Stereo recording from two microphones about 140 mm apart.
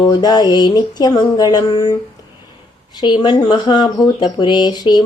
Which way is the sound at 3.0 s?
35° left (ahead or behind).